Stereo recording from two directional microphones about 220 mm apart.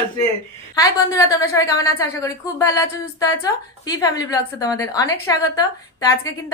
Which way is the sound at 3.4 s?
15° left (ahead or behind).